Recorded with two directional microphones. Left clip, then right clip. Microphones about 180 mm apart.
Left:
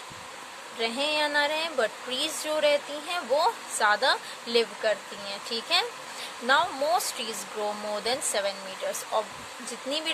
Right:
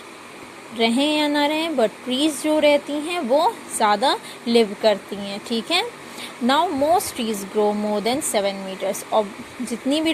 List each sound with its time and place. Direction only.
0.8 s speech: 20° right (ahead or behind)